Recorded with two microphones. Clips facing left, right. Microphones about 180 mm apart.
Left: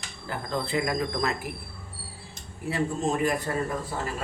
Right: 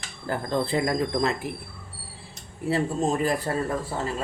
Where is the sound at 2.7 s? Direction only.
30° right (ahead or behind).